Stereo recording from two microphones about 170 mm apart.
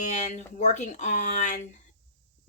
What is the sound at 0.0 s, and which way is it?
Speech, 45° left (ahead or behind).